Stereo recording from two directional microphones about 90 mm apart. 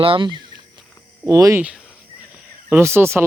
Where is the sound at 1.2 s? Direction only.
40° right (ahead or behind).